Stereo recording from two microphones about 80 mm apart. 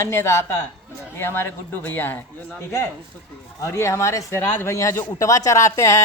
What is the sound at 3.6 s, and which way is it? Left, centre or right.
Speech, left.